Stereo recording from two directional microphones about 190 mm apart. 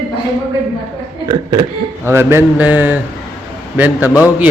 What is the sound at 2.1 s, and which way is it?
A man's voice, 10° right (ahead or behind).